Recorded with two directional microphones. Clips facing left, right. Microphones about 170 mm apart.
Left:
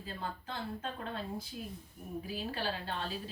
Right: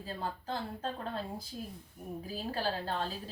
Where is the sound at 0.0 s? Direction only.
35° right (ahead or behind).